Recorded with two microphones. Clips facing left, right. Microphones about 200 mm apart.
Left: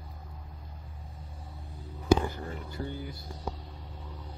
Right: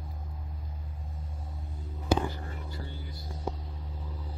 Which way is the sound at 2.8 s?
50° left (ahead or behind).